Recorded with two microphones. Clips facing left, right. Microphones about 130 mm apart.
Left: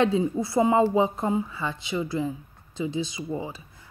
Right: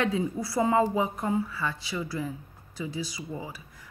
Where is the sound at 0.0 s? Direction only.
25° left (ahead or behind).